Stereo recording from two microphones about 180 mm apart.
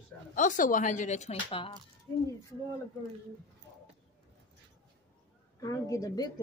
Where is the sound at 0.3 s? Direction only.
45° left (ahead or behind).